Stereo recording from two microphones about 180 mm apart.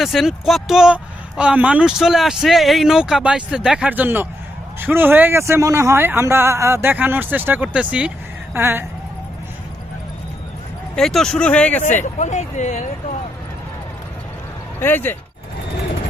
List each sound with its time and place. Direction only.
0.0 s a man's voice: centre (ahead or behind)
10.9 s speech: centre (ahead or behind)
12.2 s speech: 40° left (ahead or behind)
14.8 s speech: 10° left (ahead or behind)